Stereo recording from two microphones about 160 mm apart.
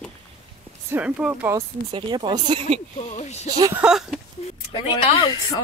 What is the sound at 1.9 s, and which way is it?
Speech, 30° right (ahead or behind).